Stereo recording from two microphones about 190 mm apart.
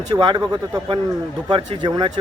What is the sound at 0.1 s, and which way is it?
Speech, 25° right (ahead or behind).